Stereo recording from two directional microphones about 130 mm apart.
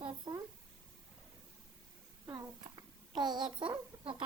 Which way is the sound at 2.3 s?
30° right (ahead or behind).